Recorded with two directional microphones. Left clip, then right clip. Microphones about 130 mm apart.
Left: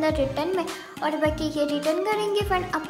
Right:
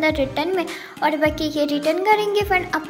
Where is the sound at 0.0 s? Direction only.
20° right (ahead or behind).